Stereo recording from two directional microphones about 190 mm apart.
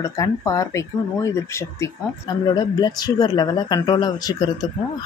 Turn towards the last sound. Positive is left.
turn(degrees=20)  # may be behind; listen again after turning